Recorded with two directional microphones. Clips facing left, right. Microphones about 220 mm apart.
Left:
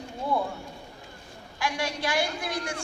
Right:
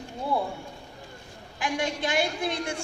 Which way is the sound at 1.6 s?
20° right (ahead or behind).